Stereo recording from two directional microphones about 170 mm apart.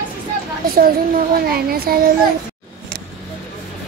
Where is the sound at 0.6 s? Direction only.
60° right (ahead or behind).